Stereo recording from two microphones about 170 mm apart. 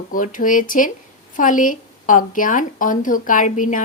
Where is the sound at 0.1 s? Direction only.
50° left (ahead or behind).